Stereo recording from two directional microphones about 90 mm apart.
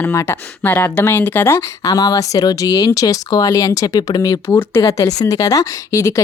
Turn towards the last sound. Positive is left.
turn(degrees=40)  # may be behind; listen again after turning